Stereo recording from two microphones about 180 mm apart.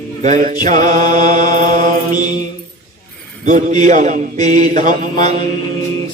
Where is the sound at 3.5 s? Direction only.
45° right (ahead or behind).